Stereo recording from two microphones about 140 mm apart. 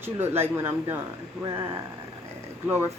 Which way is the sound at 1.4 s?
30° right (ahead or behind).